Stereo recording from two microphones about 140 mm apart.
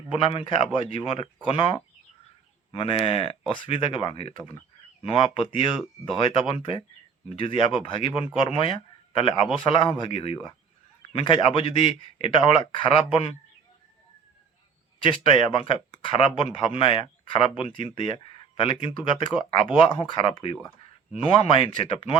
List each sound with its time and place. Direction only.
0.1 s speech: 40° left (ahead or behind)
15.0 s speech: 40° left (ahead or behind)